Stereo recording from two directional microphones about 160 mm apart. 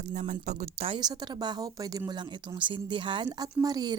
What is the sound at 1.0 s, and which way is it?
A woman's voice, 25° right (ahead or behind).